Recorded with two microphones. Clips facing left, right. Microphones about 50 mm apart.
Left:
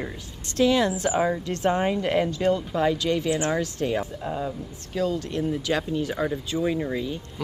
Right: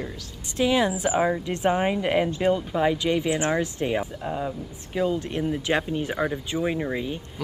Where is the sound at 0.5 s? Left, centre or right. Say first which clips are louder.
Left 1 dB; centre.